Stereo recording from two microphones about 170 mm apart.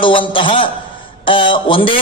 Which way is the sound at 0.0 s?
30° left (ahead or behind).